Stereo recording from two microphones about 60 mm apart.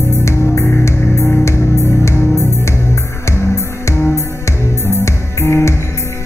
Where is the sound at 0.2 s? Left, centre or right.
Left.